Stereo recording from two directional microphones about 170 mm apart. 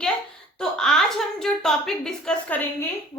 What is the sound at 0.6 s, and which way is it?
A woman's voice, 5° left (ahead or behind).